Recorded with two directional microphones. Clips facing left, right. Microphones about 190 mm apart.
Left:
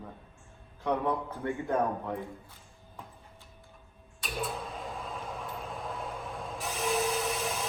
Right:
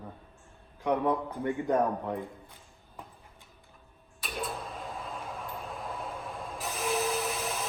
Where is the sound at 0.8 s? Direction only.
15° right (ahead or behind).